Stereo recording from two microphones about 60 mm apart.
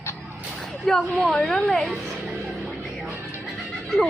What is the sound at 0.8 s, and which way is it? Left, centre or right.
A woman's voice, centre.